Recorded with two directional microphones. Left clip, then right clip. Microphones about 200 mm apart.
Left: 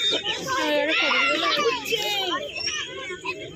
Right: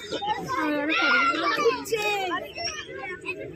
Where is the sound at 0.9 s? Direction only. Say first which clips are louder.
Right 3 dB; 35° left (ahead or behind).